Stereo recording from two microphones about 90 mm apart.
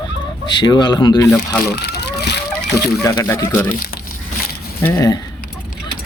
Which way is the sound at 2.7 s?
35° left (ahead or behind).